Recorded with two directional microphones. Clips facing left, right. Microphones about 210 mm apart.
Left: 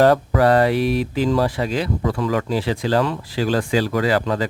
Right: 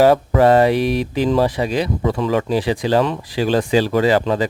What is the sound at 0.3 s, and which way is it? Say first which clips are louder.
Speech: right 3 dB; 20° right (ahead or behind).